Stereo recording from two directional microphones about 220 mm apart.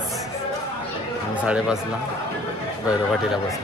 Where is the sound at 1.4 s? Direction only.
5° right (ahead or behind).